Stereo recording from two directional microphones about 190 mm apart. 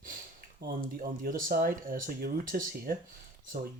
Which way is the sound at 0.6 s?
45° right (ahead or behind).